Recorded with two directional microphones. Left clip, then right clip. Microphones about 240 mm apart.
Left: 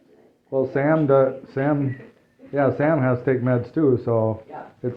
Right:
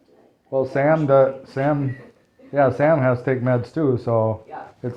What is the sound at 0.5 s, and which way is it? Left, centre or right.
Speech, right.